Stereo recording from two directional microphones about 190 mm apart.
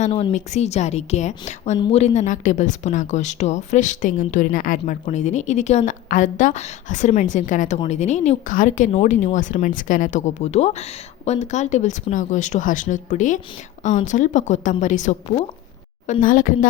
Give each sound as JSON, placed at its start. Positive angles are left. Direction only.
{"t": 0.0, "sound": "speech", "side_deg": 30}